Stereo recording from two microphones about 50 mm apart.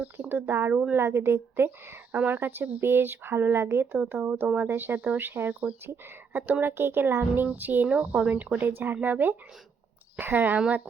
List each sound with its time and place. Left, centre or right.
0.2 s a woman's voice: right
2.1 s speech: right
4.1 s speech: right
4.9 s speech: right
5.2 s speech: right
5.8 s speech: right
7.3 s speech: right